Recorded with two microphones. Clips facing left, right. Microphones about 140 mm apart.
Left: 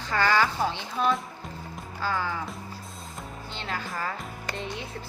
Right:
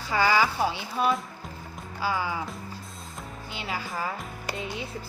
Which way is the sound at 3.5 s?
5° right (ahead or behind).